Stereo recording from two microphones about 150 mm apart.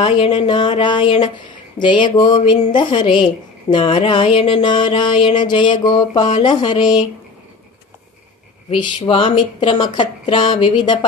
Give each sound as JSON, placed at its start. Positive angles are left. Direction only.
{"t": 0.0, "sound": "a woman's voice", "side_deg": 35}
{"t": 8.8, "sound": "a woman's voice", "side_deg": 35}